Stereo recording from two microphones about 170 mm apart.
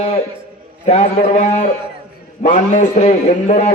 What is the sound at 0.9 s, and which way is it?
A man's voice, 40° left (ahead or behind).